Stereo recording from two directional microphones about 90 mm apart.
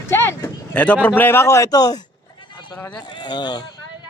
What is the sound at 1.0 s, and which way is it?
Speech, 20° left (ahead or behind).